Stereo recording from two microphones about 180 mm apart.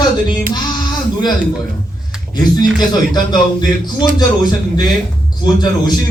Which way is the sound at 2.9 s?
25° left (ahead or behind).